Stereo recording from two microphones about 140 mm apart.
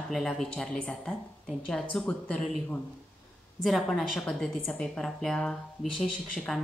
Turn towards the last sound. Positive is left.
turn(degrees=10)  # may be behind; listen again after turning